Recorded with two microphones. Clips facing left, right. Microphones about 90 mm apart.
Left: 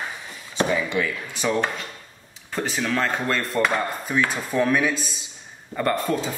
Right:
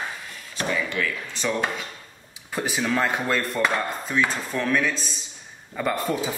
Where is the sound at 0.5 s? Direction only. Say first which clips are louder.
Left 4 dB; 15° left (ahead or behind).